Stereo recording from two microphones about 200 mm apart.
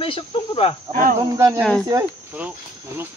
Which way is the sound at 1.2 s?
15° right (ahead or behind).